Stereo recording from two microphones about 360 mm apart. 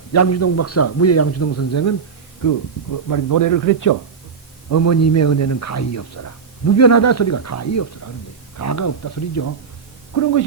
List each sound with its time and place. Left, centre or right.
0.1 s speech: left
2.4 s speech: left